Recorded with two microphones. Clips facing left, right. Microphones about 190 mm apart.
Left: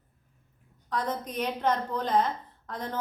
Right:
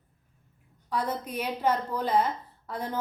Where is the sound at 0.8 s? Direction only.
10° right (ahead or behind).